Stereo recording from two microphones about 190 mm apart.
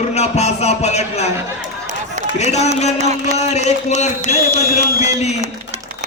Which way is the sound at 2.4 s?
35° left (ahead or behind).